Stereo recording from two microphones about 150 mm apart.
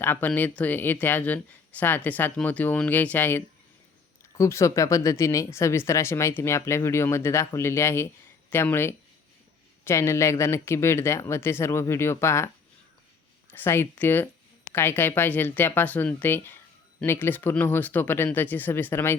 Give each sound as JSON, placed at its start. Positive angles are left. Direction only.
{"t": 0.0, "sound": "speech", "side_deg": 15}
{"t": 13.5, "sound": "speech", "side_deg": 15}